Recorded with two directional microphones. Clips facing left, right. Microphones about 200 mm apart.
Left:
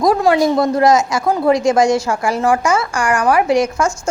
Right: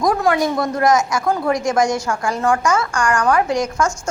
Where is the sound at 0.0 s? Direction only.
35° left (ahead or behind).